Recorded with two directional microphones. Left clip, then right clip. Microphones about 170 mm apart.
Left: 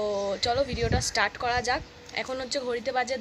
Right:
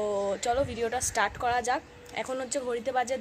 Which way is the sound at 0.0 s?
10° right (ahead or behind).